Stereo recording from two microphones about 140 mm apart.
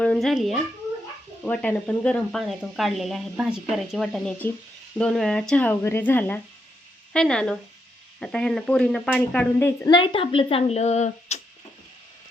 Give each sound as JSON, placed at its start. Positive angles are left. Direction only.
{"t": 0.0, "sound": "speech", "side_deg": 5}
{"t": 1.5, "sound": "speech", "side_deg": 10}